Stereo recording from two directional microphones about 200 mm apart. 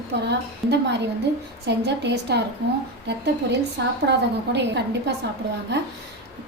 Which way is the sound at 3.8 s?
60° right (ahead or behind).